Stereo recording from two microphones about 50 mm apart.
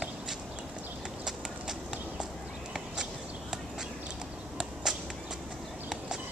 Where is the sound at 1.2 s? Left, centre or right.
Centre.